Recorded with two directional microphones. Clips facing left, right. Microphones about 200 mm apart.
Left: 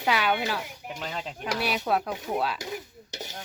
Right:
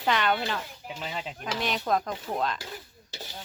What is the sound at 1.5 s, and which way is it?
Speech, 10° left (ahead or behind).